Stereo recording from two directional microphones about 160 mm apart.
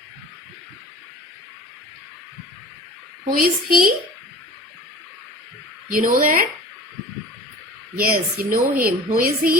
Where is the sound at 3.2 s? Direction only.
65° right (ahead or behind).